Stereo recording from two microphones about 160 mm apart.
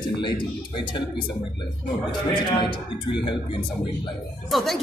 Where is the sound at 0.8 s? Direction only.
30° left (ahead or behind).